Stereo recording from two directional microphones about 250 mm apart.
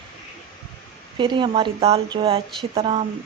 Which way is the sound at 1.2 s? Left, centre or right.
Centre.